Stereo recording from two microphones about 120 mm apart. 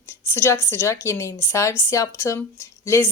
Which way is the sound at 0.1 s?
20° left (ahead or behind).